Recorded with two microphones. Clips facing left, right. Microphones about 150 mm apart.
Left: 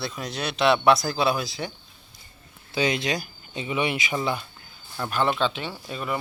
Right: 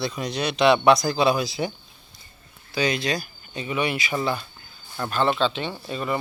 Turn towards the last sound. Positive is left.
turn(degrees=5)  # may be behind; listen again after turning